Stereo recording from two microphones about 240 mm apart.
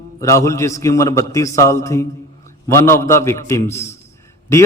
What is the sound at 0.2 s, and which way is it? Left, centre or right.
A man's voice, centre.